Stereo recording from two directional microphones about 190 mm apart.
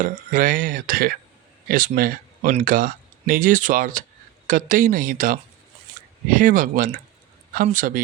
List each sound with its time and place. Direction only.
0.0 s speech: 45° right (ahead or behind)